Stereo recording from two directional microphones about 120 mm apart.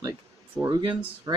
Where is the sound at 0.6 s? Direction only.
35° right (ahead or behind).